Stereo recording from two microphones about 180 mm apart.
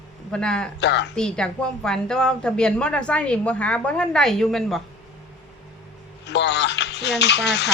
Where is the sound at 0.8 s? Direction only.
75° left (ahead or behind).